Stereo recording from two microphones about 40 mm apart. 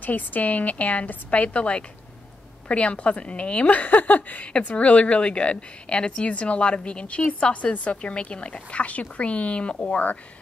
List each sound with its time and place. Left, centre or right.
0.0 s a woman's voice: left
4.6 s a woman's voice: left